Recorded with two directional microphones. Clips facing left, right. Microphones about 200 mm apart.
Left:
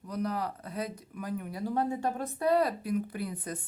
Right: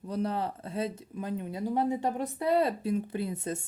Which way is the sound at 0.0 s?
25° right (ahead or behind).